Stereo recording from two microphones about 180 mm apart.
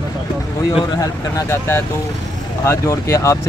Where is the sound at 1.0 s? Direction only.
15° left (ahead or behind).